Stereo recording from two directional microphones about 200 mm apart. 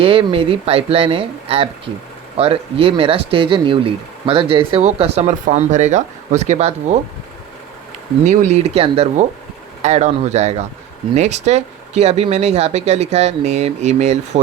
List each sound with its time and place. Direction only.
0.0 s speech: 25° right (ahead or behind)
8.3 s speech: 35° right (ahead or behind)